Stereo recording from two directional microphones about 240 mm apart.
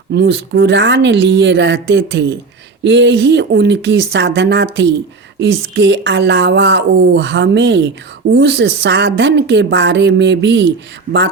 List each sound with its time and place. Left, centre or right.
0.1 s speech: right